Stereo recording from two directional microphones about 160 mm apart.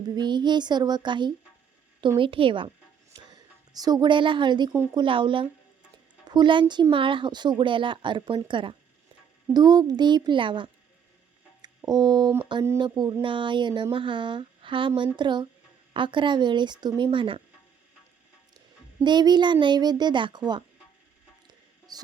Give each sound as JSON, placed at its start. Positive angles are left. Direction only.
{"t": 0.2, "sound": "a child's voice", "side_deg": -30}
{"t": 19.0, "sound": "a child's voice", "side_deg": -25}
{"t": 21.4, "sound": "a sound", "side_deg": -25}